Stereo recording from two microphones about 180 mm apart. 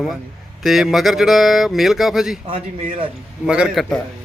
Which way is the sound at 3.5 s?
5° right (ahead or behind).